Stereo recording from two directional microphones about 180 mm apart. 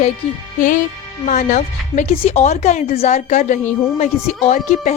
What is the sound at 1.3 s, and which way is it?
Speech, 45° left (ahead or behind).